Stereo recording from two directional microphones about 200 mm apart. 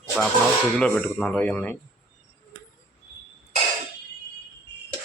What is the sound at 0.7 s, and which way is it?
Speech, 5° left (ahead or behind).